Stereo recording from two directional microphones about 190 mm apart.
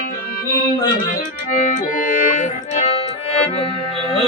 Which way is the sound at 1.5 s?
40° left (ahead or behind).